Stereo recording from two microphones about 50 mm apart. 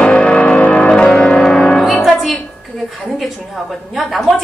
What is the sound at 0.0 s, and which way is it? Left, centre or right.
Music, centre.